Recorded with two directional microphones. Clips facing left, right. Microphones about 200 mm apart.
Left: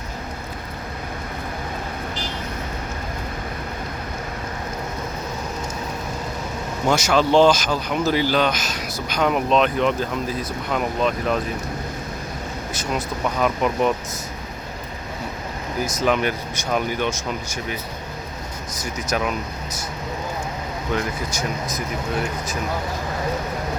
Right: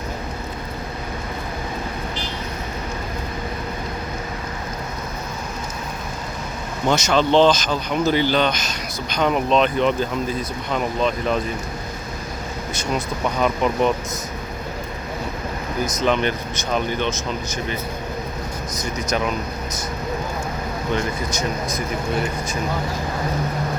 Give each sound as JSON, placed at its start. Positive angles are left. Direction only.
{"t": 6.8, "sound": "speech", "side_deg": 5}
{"t": 13.4, "sound": "speech", "side_deg": 5}
{"t": 15.8, "sound": "speech", "side_deg": 5}
{"t": 18.8, "sound": "speech", "side_deg": 5}
{"t": 20.9, "sound": "speech", "side_deg": 5}